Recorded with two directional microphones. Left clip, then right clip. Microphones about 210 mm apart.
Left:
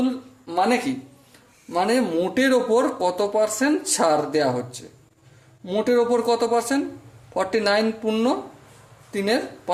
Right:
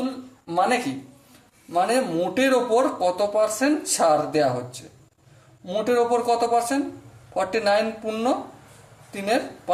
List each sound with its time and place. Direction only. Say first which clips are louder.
0.4 s speech: left 1 dB; 35° left (ahead or behind)